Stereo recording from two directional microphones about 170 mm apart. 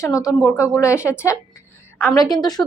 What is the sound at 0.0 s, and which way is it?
Speech, 20° left (ahead or behind).